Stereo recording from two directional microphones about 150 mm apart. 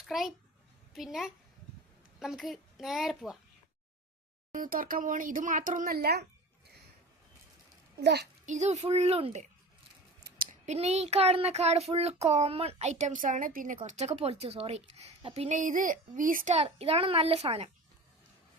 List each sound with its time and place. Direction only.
0.0 s a child's voice: centre (ahead or behind)
4.5 s speech: 65° right (ahead or behind); by 6.2 s 90° right
8.0 s a child's voice: 90° right
8.4 s a child's voice: 50° right (ahead or behind)
10.2 s scissors: 75° right (ahead or behind)
10.7 s a child's voice: 45° right (ahead or behind); by 13.7 s 65° right (ahead or behind)
13.8 s a child's voice: 50° right (ahead or behind)
16.6 s a child's voice: 40° right (ahead or behind)